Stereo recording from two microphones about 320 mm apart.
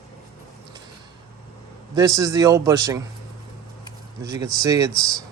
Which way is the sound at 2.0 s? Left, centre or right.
Centre.